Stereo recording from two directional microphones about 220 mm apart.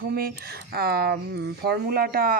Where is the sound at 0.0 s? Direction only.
45° right (ahead or behind).